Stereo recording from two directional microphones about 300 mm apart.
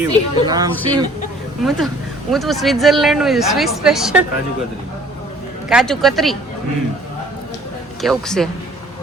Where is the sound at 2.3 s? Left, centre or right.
Centre.